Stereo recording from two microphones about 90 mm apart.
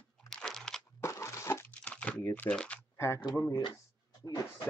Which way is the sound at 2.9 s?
30° left (ahead or behind).